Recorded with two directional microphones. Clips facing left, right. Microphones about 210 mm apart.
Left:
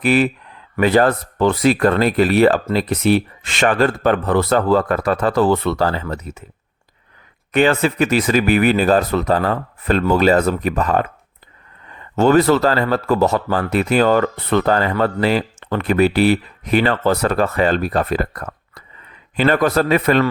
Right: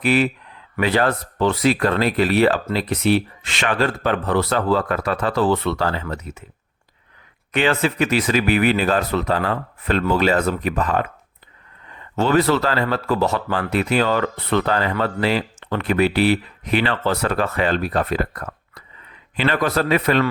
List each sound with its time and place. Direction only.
0.0 s speech: 45° left (ahead or behind)
7.5 s speech: 45° left (ahead or behind)
12.1 s speech: 45° left (ahead or behind)